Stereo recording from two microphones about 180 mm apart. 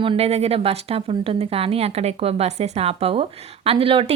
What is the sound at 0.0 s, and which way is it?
A woman's voice, 30° right (ahead or behind).